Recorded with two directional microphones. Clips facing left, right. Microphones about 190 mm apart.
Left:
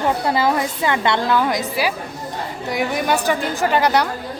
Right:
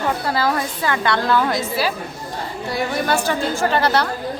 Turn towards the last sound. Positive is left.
turn(degrees=15)  # may be behind; listen again after turning